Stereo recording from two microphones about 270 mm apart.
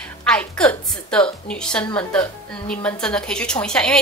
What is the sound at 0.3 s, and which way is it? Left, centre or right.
A woman's voice, centre.